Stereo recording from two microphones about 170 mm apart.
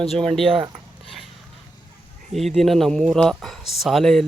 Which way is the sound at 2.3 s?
Centre (ahead or behind).